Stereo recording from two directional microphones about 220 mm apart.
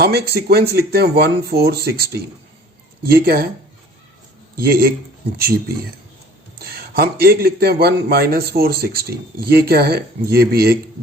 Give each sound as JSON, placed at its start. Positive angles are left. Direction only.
{"t": 0.0, "sound": "speech", "side_deg": -45}
{"t": 4.5, "sound": "speech", "side_deg": -40}
{"t": 6.7, "sound": "speech", "side_deg": -45}